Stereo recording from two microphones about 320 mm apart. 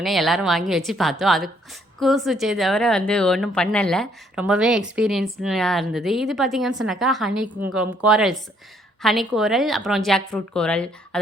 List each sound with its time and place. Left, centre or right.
0.0 s speech: centre